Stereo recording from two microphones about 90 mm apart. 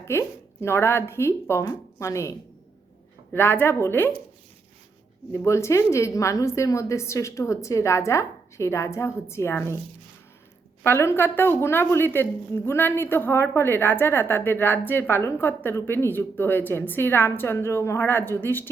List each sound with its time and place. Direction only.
0.0 s a woman's voice: 30° left (ahead or behind)
3.3 s a woman's voice: 25° left (ahead or behind)
5.5 s a woman's voice: 30° left (ahead or behind)
10.8 s a woman's voice: 30° left (ahead or behind)